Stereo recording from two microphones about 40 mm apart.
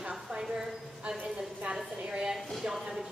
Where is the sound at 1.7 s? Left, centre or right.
Centre.